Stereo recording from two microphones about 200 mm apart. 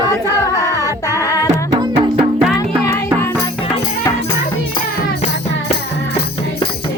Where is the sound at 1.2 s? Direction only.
15° right (ahead or behind).